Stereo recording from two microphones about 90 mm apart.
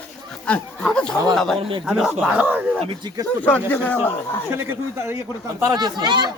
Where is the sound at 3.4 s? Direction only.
20° left (ahead or behind).